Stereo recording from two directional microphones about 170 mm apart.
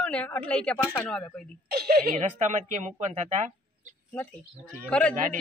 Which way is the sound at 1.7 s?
65° right (ahead or behind).